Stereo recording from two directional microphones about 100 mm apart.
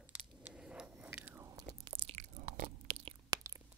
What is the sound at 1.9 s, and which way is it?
Chewing, 65° right (ahead or behind).